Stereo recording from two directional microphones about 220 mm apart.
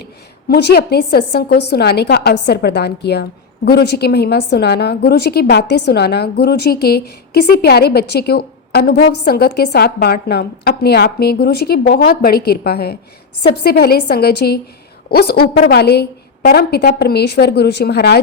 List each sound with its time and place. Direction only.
0.0 s a woman's voice: 45° left (ahead or behind)